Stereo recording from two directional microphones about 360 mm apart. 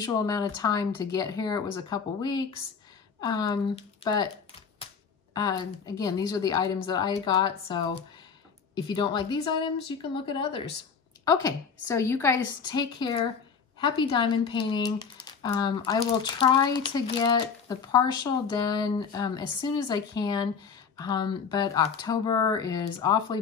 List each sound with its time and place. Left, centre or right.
0.0 s speech: centre
5.3 s speech: centre